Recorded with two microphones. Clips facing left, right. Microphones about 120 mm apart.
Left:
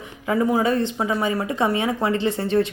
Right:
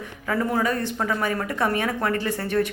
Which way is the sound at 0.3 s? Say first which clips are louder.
Left 4 dB; 15° left (ahead or behind).